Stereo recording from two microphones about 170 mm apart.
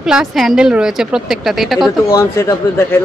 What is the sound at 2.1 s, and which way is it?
Speech, 15° left (ahead or behind).